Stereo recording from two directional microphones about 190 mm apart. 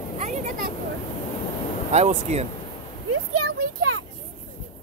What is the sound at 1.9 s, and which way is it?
Speech, 35° right (ahead or behind).